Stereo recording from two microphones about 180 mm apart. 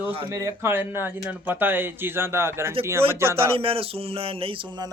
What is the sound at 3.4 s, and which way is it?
Speech, 30° right (ahead or behind).